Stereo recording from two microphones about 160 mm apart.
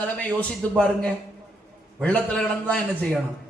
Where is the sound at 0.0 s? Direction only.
10° left (ahead or behind).